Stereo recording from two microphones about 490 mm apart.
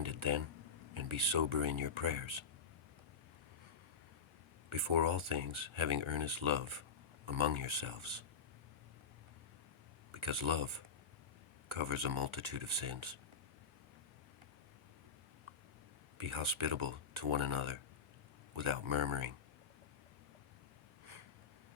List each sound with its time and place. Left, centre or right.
0.0 s a sound: right
0.9 s speech: right
4.7 s speech: right
10.1 s speech: right
16.1 s speech: right